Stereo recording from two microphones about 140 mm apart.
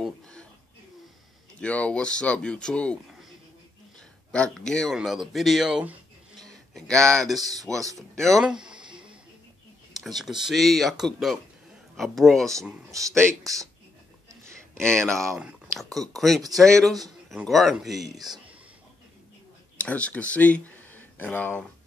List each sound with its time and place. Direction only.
0.0 s a sound: 5° left (ahead or behind)
1.6 s speech: 10° left (ahead or behind)
4.3 s speech: 5° left (ahead or behind)
8.9 s a sound: 5° right (ahead or behind)
10.0 s speech: centre (ahead or behind)
12.9 s speech: 25° right (ahead or behind)
14.8 s speech: 5° left (ahead or behind)
19.8 s speech: 10° left (ahead or behind)